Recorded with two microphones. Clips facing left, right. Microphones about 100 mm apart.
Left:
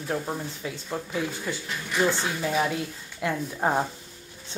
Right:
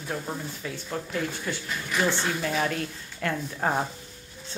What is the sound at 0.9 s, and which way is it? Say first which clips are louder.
Speech: left 1 dB; 10° left (ahead or behind).